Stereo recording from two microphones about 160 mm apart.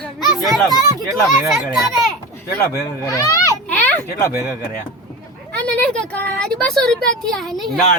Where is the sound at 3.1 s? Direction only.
20° left (ahead or behind).